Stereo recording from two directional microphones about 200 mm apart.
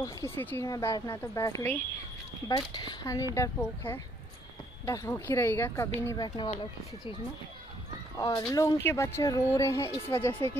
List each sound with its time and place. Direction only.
0.0 s speech: 10° left (ahead or behind)
8.2 s speech: 15° left (ahead or behind)